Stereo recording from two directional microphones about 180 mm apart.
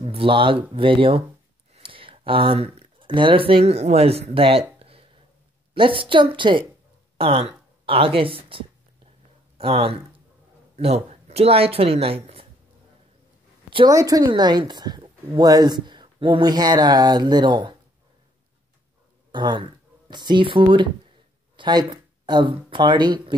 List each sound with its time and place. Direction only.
0.0 s a woman's voice: 30° right (ahead or behind)
8.5 s a sound: 30° right (ahead or behind)
9.6 s speech: 30° right (ahead or behind)
13.7 s a sound: 30° right (ahead or behind)
13.9 s a woman's voice: 20° right (ahead or behind)
19.3 s speech: 25° right (ahead or behind)